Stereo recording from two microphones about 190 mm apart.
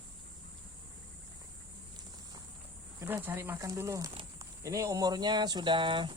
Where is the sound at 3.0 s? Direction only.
10° right (ahead or behind).